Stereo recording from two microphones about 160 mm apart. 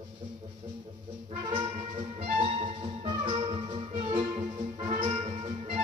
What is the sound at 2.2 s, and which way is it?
Music, 40° right (ahead or behind).